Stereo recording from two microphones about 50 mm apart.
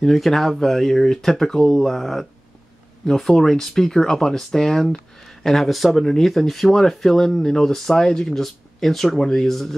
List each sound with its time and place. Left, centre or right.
0.0 s speech: centre